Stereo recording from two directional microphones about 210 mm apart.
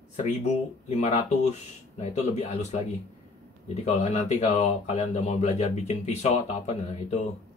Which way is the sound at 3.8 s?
30° left (ahead or behind).